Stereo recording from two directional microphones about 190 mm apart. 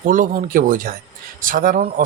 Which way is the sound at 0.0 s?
45° right (ahead or behind).